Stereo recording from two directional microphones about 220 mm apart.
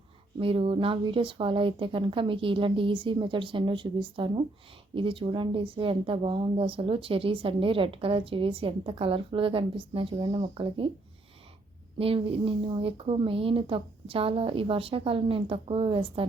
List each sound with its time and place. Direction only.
0.3 s speech: 25° right (ahead or behind)
11.9 s speech: 25° right (ahead or behind)